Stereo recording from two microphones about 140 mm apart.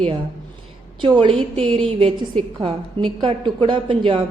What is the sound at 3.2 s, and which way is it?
A woman's voice, 40° right (ahead or behind).